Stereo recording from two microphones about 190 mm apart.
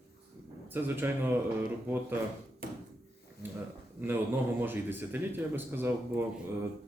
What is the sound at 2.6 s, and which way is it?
Drawer open or close, 50° right (ahead or behind).